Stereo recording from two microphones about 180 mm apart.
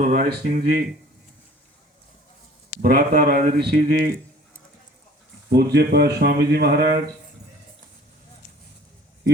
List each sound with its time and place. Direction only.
0.0 s speech: 50° right (ahead or behind)
2.8 s speech: 55° right (ahead or behind)
5.5 s speech: 65° right (ahead or behind)